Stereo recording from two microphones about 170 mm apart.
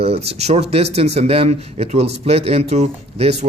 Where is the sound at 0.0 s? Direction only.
40° right (ahead or behind).